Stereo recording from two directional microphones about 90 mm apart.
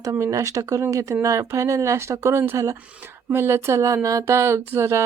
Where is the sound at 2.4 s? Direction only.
30° right (ahead or behind).